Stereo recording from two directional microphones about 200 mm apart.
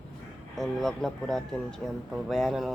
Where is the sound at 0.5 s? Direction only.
Centre (ahead or behind).